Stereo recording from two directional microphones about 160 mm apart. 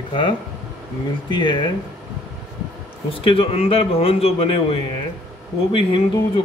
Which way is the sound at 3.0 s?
35° left (ahead or behind).